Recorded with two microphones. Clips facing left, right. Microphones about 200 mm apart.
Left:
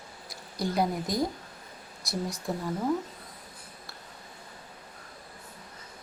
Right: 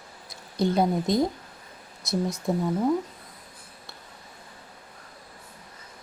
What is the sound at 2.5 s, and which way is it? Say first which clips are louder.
Speech: right 7 dB; 20° right (ahead or behind).